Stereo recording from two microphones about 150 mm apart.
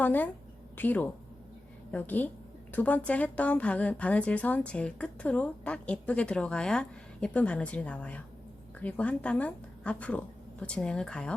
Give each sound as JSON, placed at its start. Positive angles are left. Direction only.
{"t": 0.0, "sound": "a woman's voice", "side_deg": 10}